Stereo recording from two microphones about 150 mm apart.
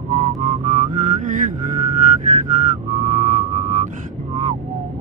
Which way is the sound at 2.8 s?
55° right (ahead or behind).